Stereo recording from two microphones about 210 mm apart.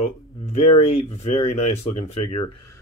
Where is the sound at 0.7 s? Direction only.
30° left (ahead or behind).